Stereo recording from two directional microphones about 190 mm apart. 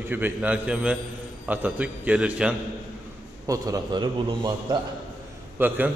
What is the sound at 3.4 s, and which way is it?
A man's voice, 15° right (ahead or behind).